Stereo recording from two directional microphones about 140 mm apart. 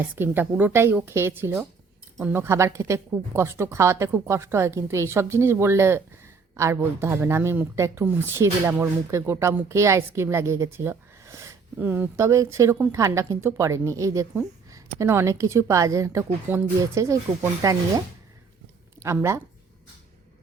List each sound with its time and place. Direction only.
0.2 s a woman's voice: 15° right (ahead or behind)